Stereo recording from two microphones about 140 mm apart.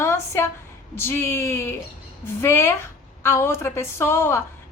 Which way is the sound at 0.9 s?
15° left (ahead or behind).